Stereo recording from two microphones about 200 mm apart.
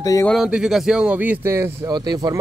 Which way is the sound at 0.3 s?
5° right (ahead or behind).